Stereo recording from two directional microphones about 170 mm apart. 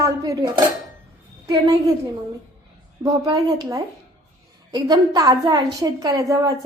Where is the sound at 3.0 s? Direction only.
20° right (ahead or behind).